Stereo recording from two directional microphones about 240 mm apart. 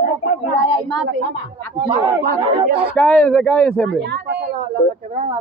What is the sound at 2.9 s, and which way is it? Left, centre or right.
Speech, centre.